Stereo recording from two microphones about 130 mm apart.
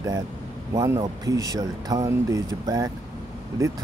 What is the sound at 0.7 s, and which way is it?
Speech, 25° right (ahead or behind).